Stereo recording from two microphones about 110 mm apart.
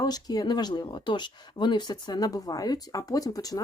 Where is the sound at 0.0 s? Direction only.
35° left (ahead or behind).